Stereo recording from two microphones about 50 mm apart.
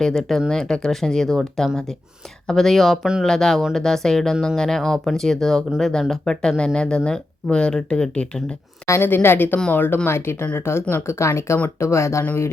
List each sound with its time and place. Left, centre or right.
0.0 s speech: centre
9.0 s a woman's voice: left
10.1 s speech: left
11.0 s speech: left